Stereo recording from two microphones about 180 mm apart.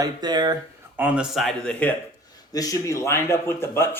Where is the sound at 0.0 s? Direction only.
25° right (ahead or behind).